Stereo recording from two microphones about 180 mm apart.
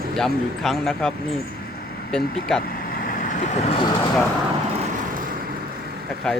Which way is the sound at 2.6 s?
55° left (ahead or behind).